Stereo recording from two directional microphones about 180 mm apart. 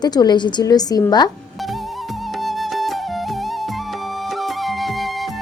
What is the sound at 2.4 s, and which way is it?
Music, centre (ahead or behind).